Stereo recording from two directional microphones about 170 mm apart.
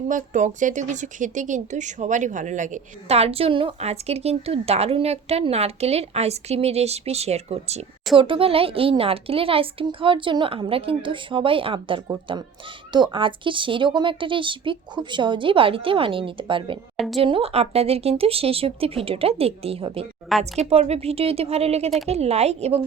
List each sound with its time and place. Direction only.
0.1 s speech: 45° right (ahead or behind)